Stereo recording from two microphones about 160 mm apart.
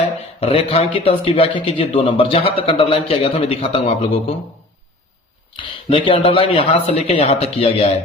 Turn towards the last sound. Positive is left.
turn(degrees=40)  # may be behind; listen again after turning